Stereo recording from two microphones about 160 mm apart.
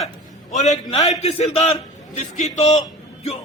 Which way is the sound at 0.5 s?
45° left (ahead or behind).